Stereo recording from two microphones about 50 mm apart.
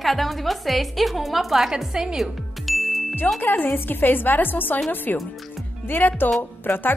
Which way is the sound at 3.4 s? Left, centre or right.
Left.